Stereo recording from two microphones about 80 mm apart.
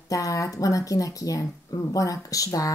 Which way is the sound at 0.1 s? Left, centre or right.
Left.